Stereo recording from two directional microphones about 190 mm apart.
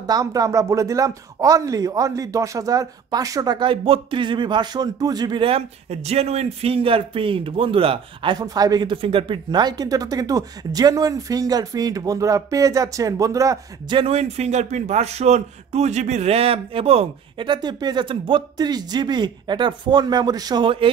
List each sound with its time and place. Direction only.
0.0 s speech: 20° right (ahead or behind)